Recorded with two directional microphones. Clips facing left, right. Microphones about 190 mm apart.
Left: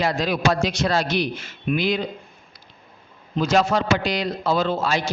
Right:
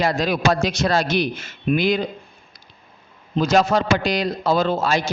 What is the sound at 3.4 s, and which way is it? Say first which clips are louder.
A man's voice: right 2 dB; 40° right (ahead or behind).